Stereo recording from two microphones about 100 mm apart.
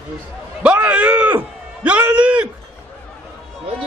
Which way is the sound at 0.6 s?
10° right (ahead or behind).